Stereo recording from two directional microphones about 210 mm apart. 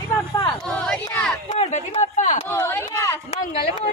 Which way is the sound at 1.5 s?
30° left (ahead or behind).